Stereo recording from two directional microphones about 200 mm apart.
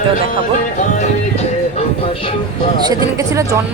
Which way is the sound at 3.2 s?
15° right (ahead or behind).